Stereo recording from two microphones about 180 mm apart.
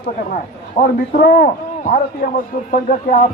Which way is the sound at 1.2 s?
60° left (ahead or behind).